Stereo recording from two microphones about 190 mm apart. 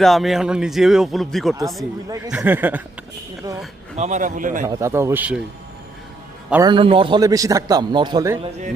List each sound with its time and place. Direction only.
0.0 s a man's voice: centre (ahead or behind)
2.0 s a man's voice: 20° right (ahead or behind)
3.9 s a man's voice: 40° right (ahead or behind)
4.6 s speech: 15° right (ahead or behind)
6.7 s a man's voice: 25° right (ahead or behind)